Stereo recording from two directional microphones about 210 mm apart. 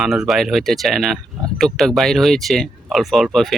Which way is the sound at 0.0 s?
Centre (ahead or behind).